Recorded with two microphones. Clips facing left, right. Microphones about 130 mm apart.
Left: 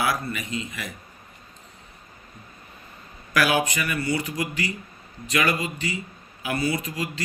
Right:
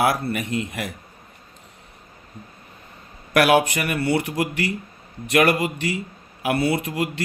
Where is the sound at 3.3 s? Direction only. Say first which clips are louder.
Right 5 dB; 65° right (ahead or behind).